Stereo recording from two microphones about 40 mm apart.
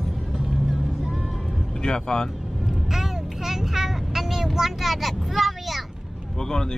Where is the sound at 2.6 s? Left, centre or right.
Centre.